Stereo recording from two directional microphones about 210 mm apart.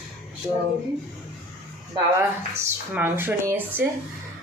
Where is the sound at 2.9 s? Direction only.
10° right (ahead or behind).